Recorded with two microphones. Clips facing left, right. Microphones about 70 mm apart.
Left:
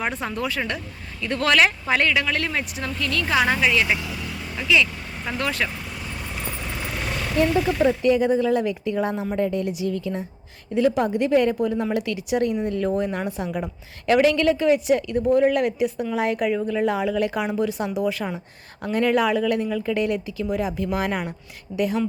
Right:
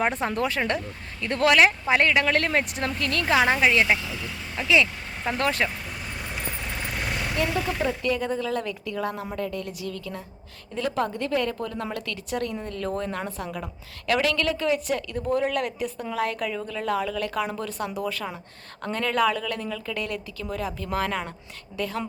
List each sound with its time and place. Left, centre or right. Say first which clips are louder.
0.0 s speech: right 2 dB; right
1.5 s speech: even; right
3.3 s speech: even; right
5.4 s speech: right 1 dB; right
7.8 s a woman's voice: left 7 dB; centre